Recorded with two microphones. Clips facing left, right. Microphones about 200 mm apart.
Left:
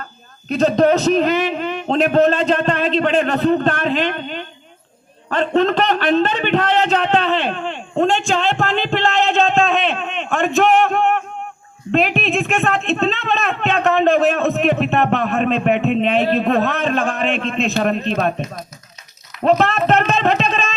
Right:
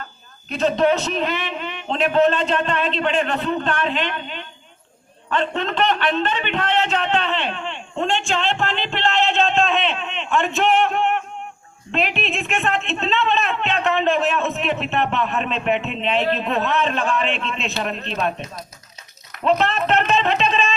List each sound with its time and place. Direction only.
0.0 s speech: 40° left (ahead or behind)
5.3 s a sound: 40° left (ahead or behind)
11.9 s speech: 45° left (ahead or behind)
19.4 s speech: 45° left (ahead or behind)